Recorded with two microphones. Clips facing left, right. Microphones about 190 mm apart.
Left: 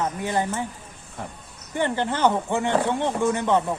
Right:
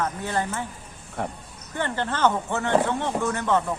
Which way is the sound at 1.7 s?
15° left (ahead or behind).